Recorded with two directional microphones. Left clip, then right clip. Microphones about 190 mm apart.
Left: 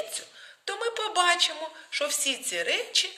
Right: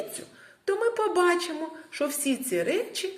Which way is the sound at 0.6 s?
35° right (ahead or behind).